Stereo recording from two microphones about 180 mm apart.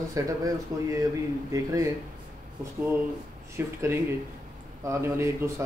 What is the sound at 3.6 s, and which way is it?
Speech, 15° right (ahead or behind).